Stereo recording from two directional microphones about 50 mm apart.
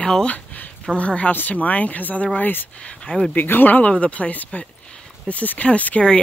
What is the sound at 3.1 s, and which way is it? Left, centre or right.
Speech, centre.